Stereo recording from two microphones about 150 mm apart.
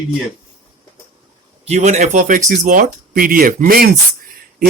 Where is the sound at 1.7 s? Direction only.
50° right (ahead or behind); by 3.9 s 75° right (ahead or behind).